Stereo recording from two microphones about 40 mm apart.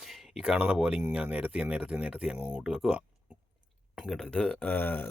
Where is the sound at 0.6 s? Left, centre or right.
Right.